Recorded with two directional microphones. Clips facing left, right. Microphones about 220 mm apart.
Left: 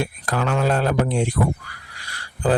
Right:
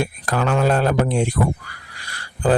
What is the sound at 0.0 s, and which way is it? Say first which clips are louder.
Speech: right 2 dB; 50° right (ahead or behind).